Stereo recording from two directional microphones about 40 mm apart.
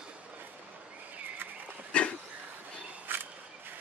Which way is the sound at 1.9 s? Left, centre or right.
Left.